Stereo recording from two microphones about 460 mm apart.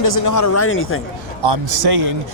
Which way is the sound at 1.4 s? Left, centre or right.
Right.